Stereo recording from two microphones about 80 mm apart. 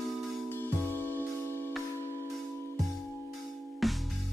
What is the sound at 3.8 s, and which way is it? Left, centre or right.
Music, centre.